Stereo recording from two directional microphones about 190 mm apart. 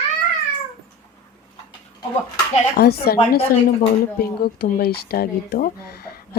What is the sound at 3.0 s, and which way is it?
Speech, 55° left (ahead or behind).